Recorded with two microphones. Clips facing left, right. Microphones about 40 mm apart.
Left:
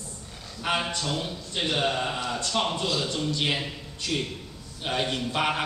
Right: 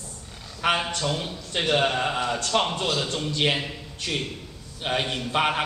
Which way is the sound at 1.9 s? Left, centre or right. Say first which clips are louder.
Right 4 dB; right.